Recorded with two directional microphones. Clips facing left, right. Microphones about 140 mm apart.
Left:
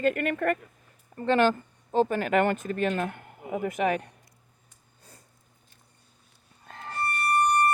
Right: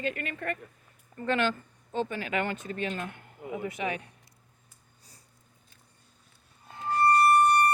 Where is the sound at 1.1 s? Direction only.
35° left (ahead or behind).